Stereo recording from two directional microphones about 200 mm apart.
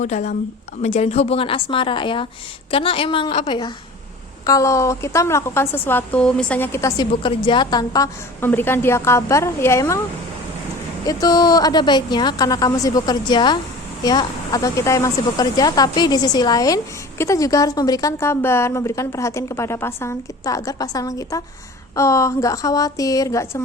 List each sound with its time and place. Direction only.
0.0 s a woman's voice: 35° left (ahead or behind)
4.4 s a woman's voice: 15° left (ahead or behind)
11.0 s a woman's voice: 20° left (ahead or behind)